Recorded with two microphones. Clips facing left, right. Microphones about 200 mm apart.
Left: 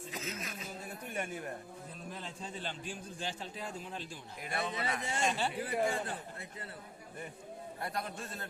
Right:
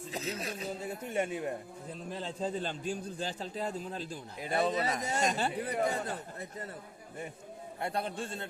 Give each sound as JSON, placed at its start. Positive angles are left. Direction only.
{"t": 0.1, "sound": "a man's voice", "side_deg": -35}
{"t": 0.9, "sound": "a man's voice", "side_deg": -25}
{"t": 7.8, "sound": "a man's voice", "side_deg": -25}